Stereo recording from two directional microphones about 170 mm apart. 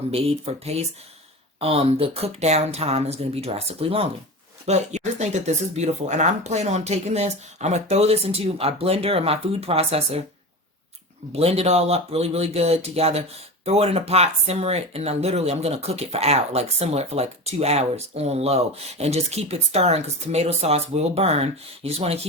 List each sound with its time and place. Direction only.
0.1 s speech: 35° right (ahead or behind)
11.3 s speech: 35° right (ahead or behind)